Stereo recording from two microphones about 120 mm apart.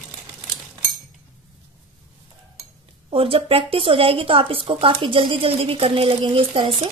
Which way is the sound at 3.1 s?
50° right (ahead or behind).